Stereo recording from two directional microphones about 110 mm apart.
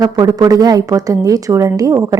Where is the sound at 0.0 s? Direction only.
35° right (ahead or behind).